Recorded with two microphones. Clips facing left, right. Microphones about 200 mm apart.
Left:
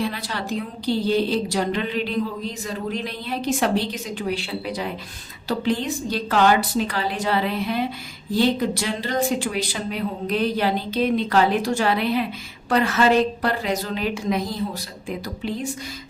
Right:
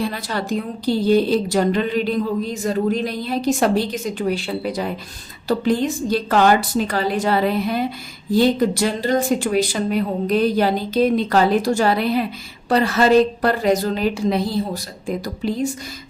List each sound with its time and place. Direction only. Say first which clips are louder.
0.0 s a woman's voice: right 3 dB; 45° right (ahead or behind)